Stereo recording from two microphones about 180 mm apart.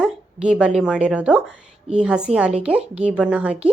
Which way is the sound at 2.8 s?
35° right (ahead or behind).